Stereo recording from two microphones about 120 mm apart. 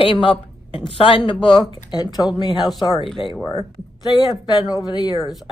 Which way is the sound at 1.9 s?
35° left (ahead or behind).